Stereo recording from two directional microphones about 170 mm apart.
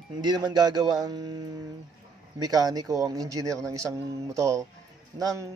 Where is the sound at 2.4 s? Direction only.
25° right (ahead or behind).